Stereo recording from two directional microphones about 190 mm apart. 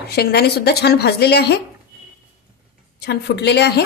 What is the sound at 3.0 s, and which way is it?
Speech, 60° left (ahead or behind).